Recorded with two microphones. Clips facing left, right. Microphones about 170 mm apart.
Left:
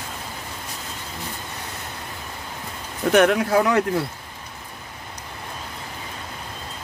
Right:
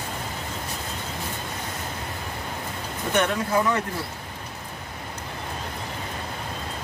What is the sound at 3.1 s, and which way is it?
Speech, 70° left (ahead or behind).